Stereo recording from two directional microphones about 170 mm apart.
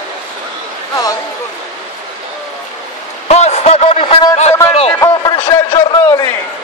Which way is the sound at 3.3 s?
40° left (ahead or behind).